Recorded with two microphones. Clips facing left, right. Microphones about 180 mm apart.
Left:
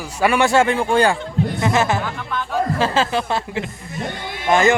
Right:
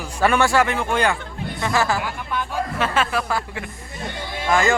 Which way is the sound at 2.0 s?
10° right (ahead or behind).